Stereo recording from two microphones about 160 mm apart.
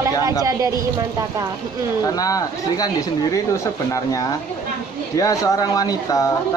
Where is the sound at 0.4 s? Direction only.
20° right (ahead or behind).